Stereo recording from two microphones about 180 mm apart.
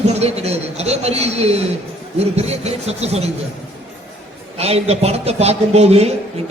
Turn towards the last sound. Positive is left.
turn(degrees=-35)  # may be behind; listen again after turning